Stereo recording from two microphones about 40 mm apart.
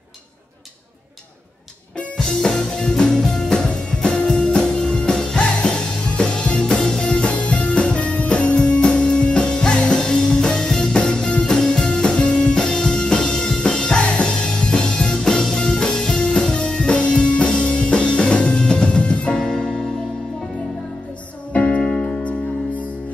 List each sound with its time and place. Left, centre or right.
2.1 s music: centre
19.4 s music: centre
21.5 s music: left